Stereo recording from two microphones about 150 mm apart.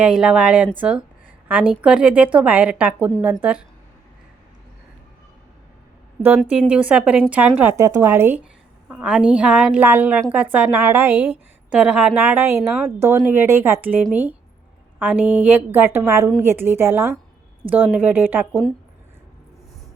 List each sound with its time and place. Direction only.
0.0 s speech: 5° right (ahead or behind)
6.4 s speech: 5° right (ahead or behind)